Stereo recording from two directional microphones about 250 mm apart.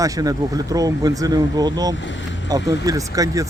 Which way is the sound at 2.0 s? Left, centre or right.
Left.